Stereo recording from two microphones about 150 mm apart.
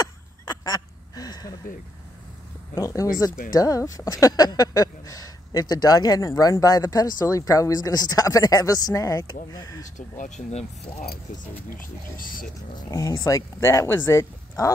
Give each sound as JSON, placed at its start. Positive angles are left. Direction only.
{"t": 0.0, "sound": "a sound", "side_deg": 25}
{"t": 2.7, "sound": "speech", "side_deg": 20}
{"t": 9.9, "sound": "speech", "side_deg": 55}
{"t": 11.7, "sound": "speech", "side_deg": 70}
{"t": 12.7, "sound": "speech", "side_deg": 25}